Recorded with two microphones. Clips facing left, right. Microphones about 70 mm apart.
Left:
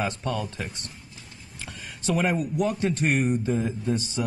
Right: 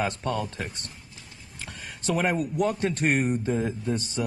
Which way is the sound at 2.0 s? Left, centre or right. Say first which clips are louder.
Left 1 dB; centre.